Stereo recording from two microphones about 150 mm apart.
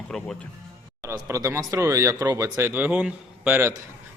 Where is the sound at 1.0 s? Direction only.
15° right (ahead or behind).